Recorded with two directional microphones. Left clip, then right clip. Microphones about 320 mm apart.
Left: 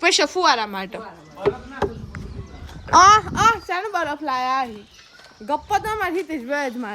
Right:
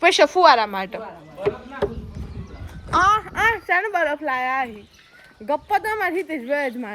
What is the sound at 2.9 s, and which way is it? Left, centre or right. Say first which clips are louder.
Speech: left 6 dB; left.